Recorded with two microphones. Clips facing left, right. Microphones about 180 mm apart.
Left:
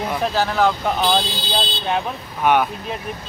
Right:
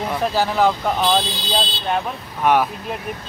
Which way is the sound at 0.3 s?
10° right (ahead or behind).